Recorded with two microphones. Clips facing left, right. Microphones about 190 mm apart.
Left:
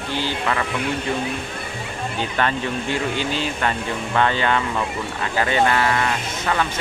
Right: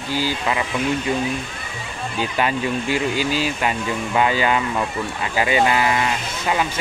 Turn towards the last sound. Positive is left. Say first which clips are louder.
# right 1 dB
turn(degrees=-10)  # may be behind; listen again after turning